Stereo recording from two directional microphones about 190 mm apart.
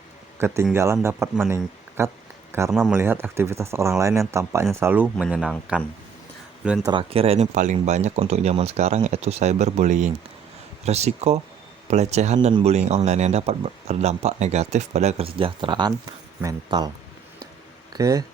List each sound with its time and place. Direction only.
0.3 s a man's voice: 15° right (ahead or behind)
6.8 s speech: 25° right (ahead or behind)
17.9 s speech: 20° right (ahead or behind)